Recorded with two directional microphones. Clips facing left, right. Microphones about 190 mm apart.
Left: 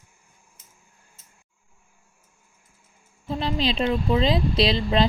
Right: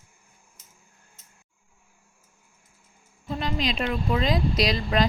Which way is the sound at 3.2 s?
30° left (ahead or behind).